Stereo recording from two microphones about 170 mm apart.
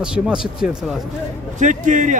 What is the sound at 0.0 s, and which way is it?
Speech, 5° right (ahead or behind).